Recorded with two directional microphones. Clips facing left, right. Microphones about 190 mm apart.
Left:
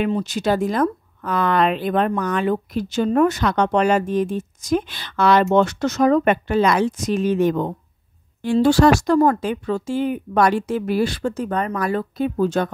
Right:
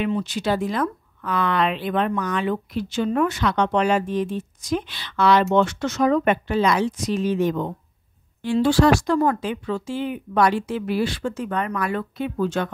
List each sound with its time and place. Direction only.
0.0 s a woman's voice: 40° left (ahead or behind)